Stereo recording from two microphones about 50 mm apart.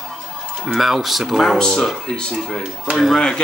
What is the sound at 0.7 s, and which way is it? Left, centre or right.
Speech, centre.